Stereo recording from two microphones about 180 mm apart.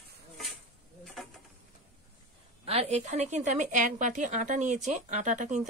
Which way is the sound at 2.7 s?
35° right (ahead or behind).